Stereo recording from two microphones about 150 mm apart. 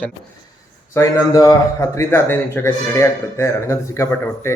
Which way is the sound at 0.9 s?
20° left (ahead or behind).